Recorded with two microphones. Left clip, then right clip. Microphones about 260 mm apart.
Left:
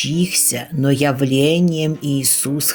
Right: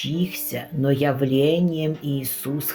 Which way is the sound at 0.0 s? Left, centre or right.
Left.